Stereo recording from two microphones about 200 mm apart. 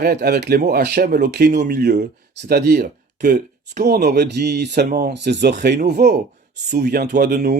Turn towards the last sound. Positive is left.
turn(degrees=-55)  # may be behind; listen again after turning